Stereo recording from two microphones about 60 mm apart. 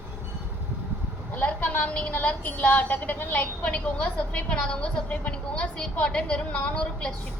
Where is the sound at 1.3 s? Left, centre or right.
Left.